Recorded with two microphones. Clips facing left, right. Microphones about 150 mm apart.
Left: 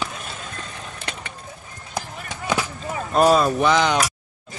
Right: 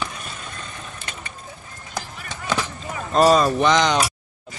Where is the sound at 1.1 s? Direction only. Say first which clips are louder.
Left 5 dB; 75° left (ahead or behind).